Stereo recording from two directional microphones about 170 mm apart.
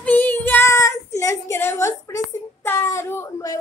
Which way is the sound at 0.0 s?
10° left (ahead or behind).